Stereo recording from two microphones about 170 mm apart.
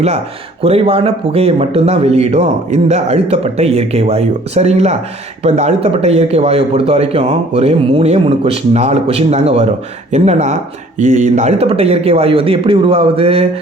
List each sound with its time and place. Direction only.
0.6 s speech: 35° right (ahead or behind)